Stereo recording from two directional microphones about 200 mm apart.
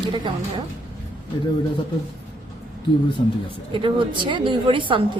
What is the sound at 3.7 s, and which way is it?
Speech, 25° right (ahead or behind).